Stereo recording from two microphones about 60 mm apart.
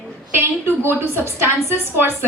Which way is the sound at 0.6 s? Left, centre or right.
Right.